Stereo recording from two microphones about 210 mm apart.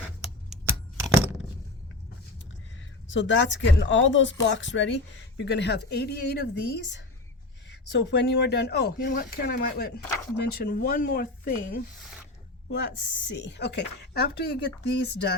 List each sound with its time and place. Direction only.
0.6 s a sound: 10° right (ahead or behind)
3.1 s speech: 60° left (ahead or behind); by 11.8 s 45° left (ahead or behind)
12.7 s speech: 55° left (ahead or behind)